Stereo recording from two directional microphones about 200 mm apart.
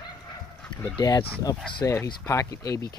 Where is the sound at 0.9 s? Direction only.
20° left (ahead or behind).